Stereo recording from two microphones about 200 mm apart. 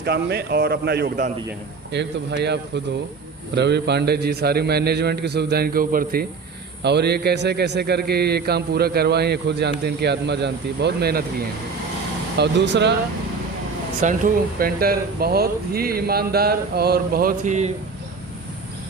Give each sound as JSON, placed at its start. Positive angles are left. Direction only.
{"t": 0.0, "sound": "a man's voice", "side_deg": -55}
{"t": 6.8, "sound": "a man's voice", "side_deg": -55}
{"t": 14.0, "sound": "speech", "side_deg": -40}